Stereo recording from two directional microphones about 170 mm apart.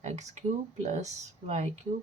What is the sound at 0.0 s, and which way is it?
A woman's voice, 45° right (ahead or behind).